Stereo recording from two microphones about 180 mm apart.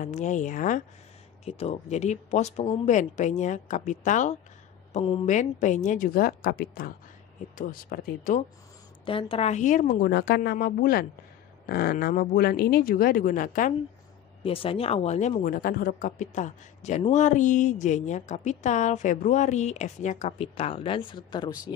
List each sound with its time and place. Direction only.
0.0 s speech: 40° left (ahead or behind)
1.4 s a man's voice: 35° left (ahead or behind)
9.0 s a man's voice: 30° left (ahead or behind); by 10.1 s 45° left (ahead or behind)
10.1 s speech: 70° left (ahead or behind); by 13.7 s 45° left (ahead or behind)
14.4 s a man's voice: 30° left (ahead or behind)
15.4 s a man's voice: 50° left (ahead or behind); by 21.7 s 25° left (ahead or behind)